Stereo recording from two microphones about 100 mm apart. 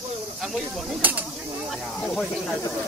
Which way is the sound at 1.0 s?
15° right (ahead or behind).